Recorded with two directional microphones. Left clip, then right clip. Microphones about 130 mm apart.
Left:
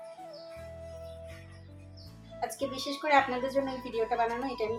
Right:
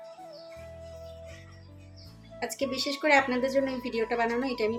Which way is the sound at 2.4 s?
50° right (ahead or behind).